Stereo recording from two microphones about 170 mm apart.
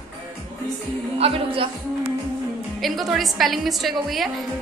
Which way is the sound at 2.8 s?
Centre (ahead or behind).